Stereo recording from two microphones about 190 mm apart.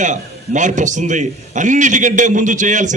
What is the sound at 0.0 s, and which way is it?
A man's voice, 40° right (ahead or behind).